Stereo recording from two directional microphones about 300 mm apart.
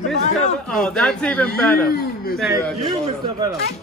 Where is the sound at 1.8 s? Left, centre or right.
Left.